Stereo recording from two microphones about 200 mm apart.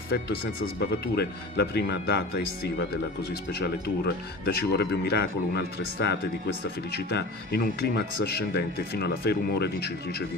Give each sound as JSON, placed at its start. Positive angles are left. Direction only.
{"t": 0.1, "sound": "speech", "side_deg": 55}
{"t": 6.9, "sound": "speech", "side_deg": 55}